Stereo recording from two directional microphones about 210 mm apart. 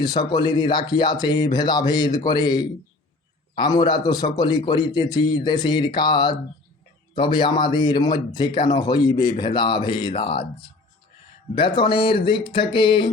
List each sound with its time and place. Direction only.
0.0 s a man's voice: 20° left (ahead or behind)